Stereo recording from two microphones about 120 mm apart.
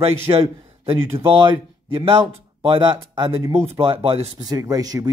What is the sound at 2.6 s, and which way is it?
A man's voice, 40° right (ahead or behind).